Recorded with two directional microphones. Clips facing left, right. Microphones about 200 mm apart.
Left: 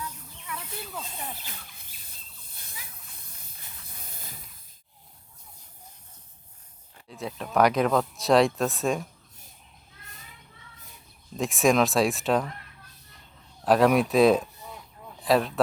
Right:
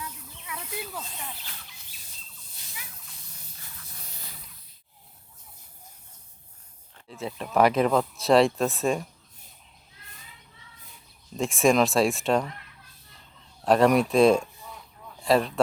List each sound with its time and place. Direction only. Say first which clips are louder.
0.4 s snake: right 2 dB; 10° right (ahead or behind)
1.7 s a sound: even; 55° left (ahead or behind)
6.9 s speech: right 1 dB; centre (ahead or behind)
11.3 s speech: right 1 dB; centre (ahead or behind)
13.7 s speech: even; centre (ahead or behind)